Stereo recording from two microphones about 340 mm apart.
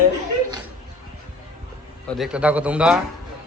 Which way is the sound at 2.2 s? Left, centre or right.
Centre.